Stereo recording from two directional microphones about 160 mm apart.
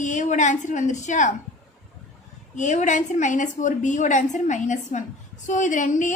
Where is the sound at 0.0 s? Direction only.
50° left (ahead or behind).